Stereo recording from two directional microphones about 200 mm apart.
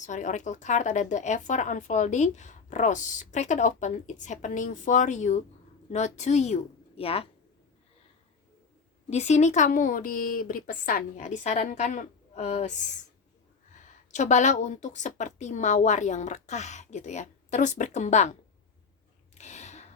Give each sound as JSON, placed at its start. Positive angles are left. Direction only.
{"t": 0.0, "sound": "a woman's voice", "side_deg": 40}
{"t": 9.0, "sound": "a woman's voice", "side_deg": 35}
{"t": 19.3, "sound": "a sound", "side_deg": 35}